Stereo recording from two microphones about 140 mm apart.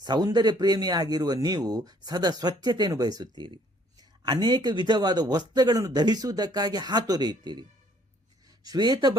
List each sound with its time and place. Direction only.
0.0 s speech: 30° right (ahead or behind)